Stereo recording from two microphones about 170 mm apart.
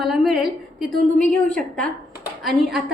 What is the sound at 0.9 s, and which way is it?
Speech, 50° right (ahead or behind).